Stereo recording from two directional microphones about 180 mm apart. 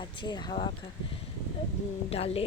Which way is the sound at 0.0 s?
25° left (ahead or behind).